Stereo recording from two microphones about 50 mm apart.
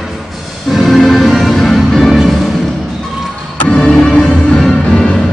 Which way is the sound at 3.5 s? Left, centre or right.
Left.